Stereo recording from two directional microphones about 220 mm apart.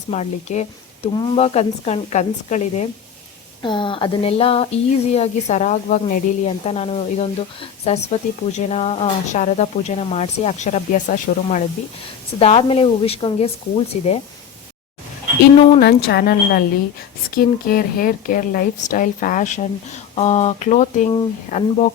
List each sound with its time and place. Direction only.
0.1 s speech: 30° left (ahead or behind)
3.6 s speech: 20° left (ahead or behind)
15.8 s speech: 45° left (ahead or behind)